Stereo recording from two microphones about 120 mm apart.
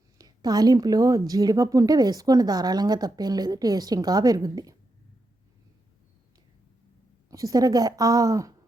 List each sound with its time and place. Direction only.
0.2 s speech: 35° right (ahead or behind)
7.3 s a woman's voice: 30° right (ahead or behind)